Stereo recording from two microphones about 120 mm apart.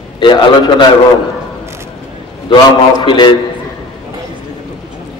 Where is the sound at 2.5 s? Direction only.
40° left (ahead or behind).